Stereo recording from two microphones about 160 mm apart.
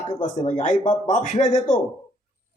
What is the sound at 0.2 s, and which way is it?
Speech, 50° left (ahead or behind).